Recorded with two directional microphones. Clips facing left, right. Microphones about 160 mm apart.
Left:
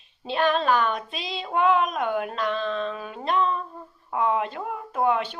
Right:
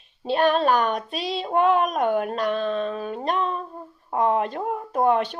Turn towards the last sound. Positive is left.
turn(degrees=-40)  # may be behind; listen again after turning